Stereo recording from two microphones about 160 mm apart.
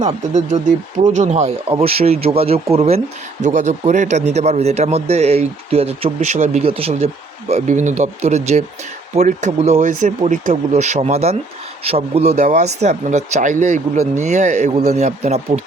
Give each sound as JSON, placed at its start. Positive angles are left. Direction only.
{"t": 0.0, "sound": "speech", "side_deg": -45}
{"t": 3.4, "sound": "speech", "side_deg": -50}